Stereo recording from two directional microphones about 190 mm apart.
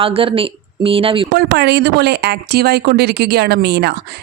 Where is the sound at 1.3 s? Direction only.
60° right (ahead or behind).